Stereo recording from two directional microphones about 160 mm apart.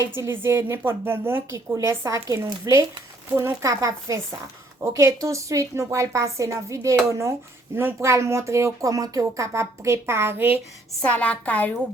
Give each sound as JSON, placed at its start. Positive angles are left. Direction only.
{"t": 0.0, "sound": "a woman's voice", "side_deg": -15}
{"t": 11.0, "sound": "a woman's voice", "side_deg": 10}